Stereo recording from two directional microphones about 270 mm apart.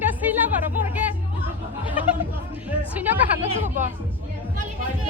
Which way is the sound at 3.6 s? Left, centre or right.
Right.